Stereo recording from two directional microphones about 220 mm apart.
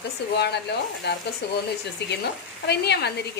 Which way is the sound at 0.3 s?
50° left (ahead or behind).